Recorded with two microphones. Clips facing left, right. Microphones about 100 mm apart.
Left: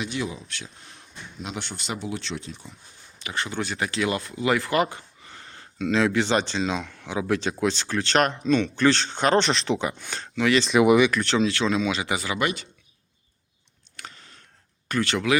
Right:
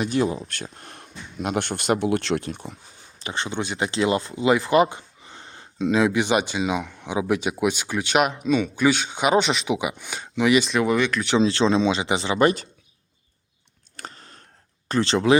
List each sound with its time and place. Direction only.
0.0 s speech: 45° right (ahead or behind); by 2.6 s 60° right (ahead or behind)
3.2 s speech: 25° right (ahead or behind)
10.7 s speech: 5° left (ahead or behind)
11.3 s speech: 30° right (ahead or behind)
13.9 s a sound: 40° right (ahead or behind)
14.8 s speech: 30° right (ahead or behind)